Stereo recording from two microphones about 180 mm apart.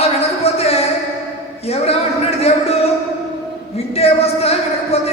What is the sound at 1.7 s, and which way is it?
A woman's voice, 35° left (ahead or behind).